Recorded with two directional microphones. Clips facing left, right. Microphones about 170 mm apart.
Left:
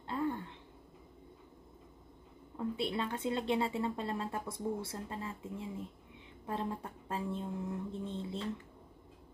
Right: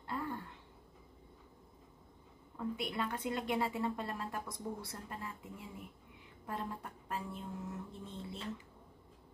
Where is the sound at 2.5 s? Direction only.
30° left (ahead or behind).